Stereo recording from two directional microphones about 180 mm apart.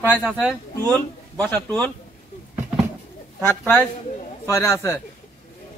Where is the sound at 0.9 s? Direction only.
10° left (ahead or behind).